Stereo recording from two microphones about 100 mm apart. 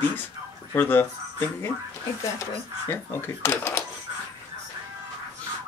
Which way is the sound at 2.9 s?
20° left (ahead or behind).